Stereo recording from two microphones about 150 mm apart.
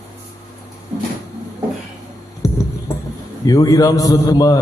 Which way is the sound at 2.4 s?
20° left (ahead or behind).